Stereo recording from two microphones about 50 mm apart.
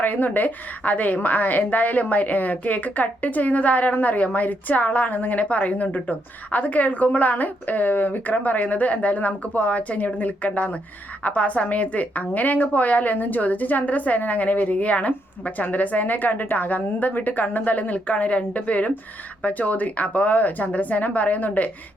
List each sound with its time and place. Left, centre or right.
0.0 s a woman's voice: left